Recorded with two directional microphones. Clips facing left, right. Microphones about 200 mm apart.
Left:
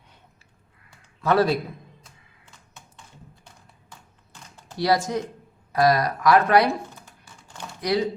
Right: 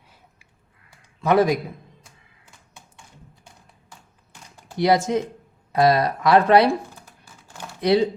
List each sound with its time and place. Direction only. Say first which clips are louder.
1.2 s a man's voice: right 2 dB; 15° right (ahead or behind)
2.7 s tap: even; 15° right (ahead or behind)
4.5 s speech: right 3 dB; 20° right (ahead or behind)
7.3 s typing: right 1 dB; 5° right (ahead or behind)
7.8 s speech: right 5 dB; 25° right (ahead or behind)